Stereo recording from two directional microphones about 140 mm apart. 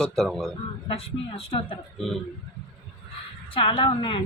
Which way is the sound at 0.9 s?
45° left (ahead or behind).